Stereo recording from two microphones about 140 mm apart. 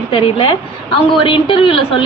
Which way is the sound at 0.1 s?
45° left (ahead or behind).